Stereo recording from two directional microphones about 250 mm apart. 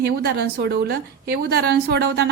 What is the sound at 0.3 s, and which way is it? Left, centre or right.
A woman's voice, right.